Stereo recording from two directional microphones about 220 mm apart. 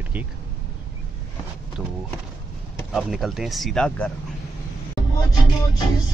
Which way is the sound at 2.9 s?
Centre (ahead or behind).